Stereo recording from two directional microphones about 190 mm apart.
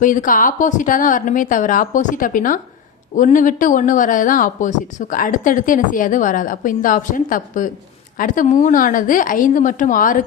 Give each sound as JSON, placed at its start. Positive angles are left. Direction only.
{"t": 0.0, "sound": "speech", "side_deg": 45}